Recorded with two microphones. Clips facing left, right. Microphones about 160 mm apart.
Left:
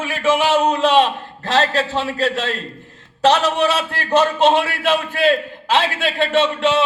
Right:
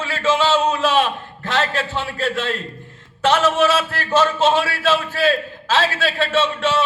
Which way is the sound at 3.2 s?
35° left (ahead or behind).